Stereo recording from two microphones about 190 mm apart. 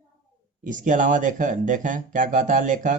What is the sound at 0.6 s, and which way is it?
Speech, 45° right (ahead or behind).